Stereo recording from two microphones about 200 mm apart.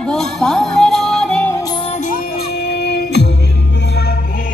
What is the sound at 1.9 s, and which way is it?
Music, 40° left (ahead or behind).